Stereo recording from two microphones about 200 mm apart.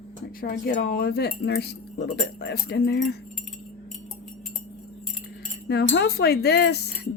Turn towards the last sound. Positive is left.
turn(degrees=55)  # may be behind; listen again after turning